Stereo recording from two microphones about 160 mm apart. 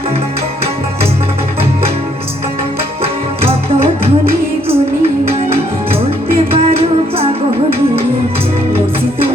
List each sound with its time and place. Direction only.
3.0 s music: 40° right (ahead or behind)